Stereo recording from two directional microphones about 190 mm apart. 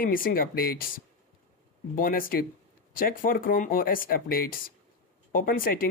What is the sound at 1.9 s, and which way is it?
Speech, 50° left (ahead or behind).